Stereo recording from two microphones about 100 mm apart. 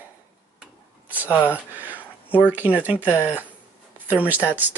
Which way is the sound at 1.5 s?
15° right (ahead or behind).